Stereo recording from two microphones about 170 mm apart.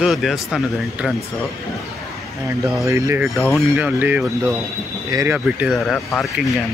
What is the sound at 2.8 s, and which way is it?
Speech, 15° right (ahead or behind).